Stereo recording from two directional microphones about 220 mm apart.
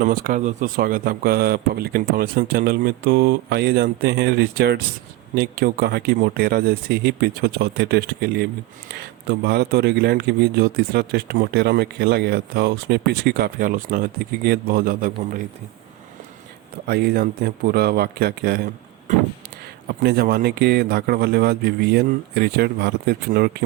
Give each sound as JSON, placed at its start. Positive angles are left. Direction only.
{"t": 0.0, "sound": "speech", "side_deg": -35}
{"t": 16.8, "sound": "speech", "side_deg": -45}